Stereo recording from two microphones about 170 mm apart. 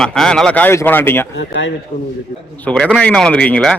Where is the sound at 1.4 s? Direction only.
90° left.